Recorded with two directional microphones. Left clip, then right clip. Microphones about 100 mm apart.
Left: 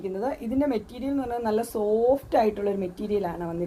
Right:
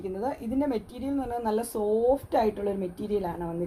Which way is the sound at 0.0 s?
20° left (ahead or behind).